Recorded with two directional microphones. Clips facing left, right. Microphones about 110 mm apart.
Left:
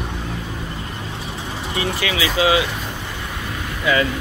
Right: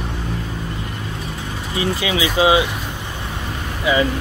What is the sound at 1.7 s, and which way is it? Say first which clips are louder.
Speech: right 3 dB; 25° right (ahead or behind).